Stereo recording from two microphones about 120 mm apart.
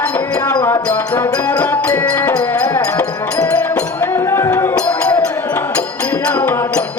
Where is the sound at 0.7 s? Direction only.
15° left (ahead or behind).